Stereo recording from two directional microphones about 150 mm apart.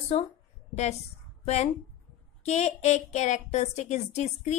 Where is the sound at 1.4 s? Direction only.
45° left (ahead or behind).